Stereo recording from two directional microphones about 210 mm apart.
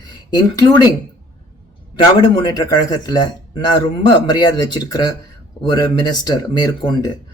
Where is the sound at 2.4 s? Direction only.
20° left (ahead or behind).